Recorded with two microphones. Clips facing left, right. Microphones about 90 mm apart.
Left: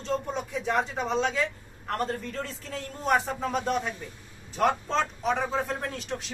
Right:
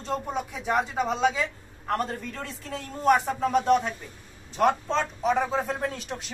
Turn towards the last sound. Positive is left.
turn(degrees=0)  # may be behind; listen again after turning